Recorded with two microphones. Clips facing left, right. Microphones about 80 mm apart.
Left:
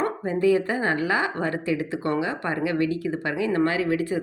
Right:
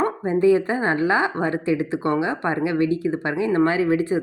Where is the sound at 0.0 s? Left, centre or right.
Right.